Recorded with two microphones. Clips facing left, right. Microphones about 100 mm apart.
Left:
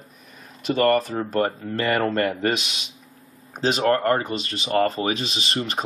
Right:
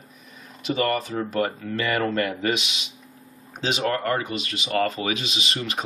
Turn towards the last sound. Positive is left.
turn(degrees=35)  # may be behind; listen again after turning